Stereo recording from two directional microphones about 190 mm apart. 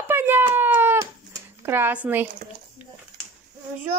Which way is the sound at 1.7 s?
10° right (ahead or behind).